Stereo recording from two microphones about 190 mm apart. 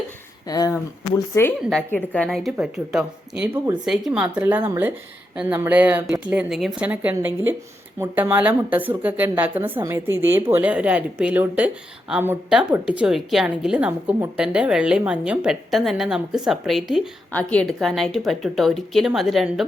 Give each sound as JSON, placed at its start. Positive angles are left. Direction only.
{"t": 0.4, "sound": "speech", "side_deg": 20}
{"t": 1.7, "sound": "a woman's voice", "side_deg": 5}